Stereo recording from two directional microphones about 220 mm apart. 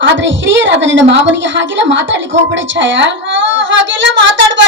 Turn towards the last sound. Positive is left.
turn(degrees=-55)  # may be behind; listen again after turning